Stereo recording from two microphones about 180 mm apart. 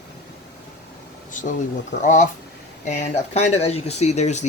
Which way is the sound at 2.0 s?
45° left (ahead or behind).